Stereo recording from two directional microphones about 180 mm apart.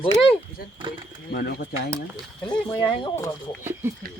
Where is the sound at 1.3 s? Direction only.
55° left (ahead or behind).